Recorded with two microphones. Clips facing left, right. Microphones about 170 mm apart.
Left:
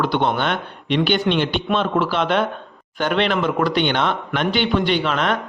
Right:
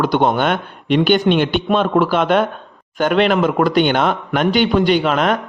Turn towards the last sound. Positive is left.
turn(degrees=-45)  # may be behind; listen again after turning